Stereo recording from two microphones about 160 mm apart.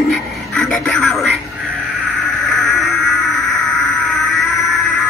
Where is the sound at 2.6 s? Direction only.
Centre (ahead or behind).